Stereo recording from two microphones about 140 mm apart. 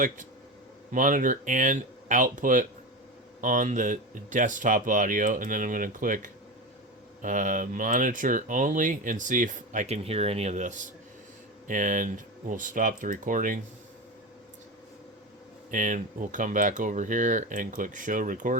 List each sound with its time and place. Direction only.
0.9 s speech: 70° right (ahead or behind)
15.7 s speech: 65° right (ahead or behind)